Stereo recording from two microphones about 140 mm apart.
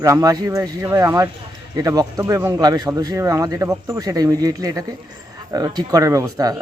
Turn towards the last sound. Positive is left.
turn(degrees=-25)  # may be behind; listen again after turning